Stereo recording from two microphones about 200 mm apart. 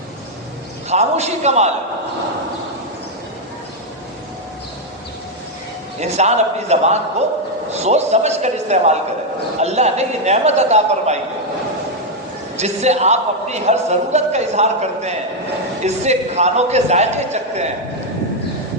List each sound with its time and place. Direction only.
0.9 s a man's voice: 35° right (ahead or behind)
6.0 s a man's voice: 35° right (ahead or behind)
12.5 s a man's voice: 35° right (ahead or behind)